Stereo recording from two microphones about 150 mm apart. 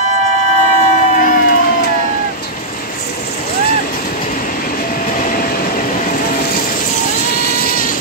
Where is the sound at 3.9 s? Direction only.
65° left (ahead or behind).